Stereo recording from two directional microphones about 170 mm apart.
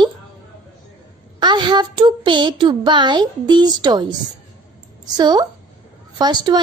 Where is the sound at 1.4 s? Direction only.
25° right (ahead or behind).